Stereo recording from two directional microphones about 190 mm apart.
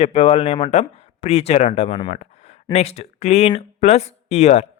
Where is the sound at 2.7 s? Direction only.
35° left (ahead or behind).